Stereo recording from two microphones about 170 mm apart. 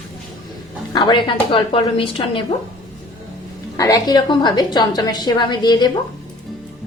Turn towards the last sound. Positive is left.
turn(degrees=25)  # may be behind; listen again after turning